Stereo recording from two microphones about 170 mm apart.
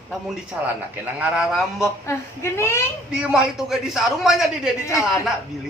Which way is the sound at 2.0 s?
15° left (ahead or behind).